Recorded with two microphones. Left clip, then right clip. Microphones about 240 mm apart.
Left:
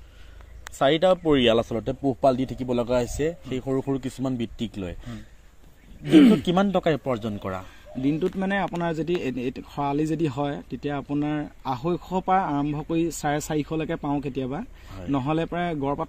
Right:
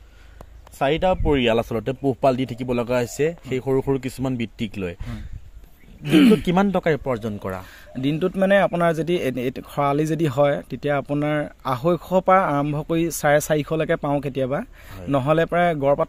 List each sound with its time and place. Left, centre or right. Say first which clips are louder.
0.7 s speech: even; right
8.0 s speech: right 4 dB; right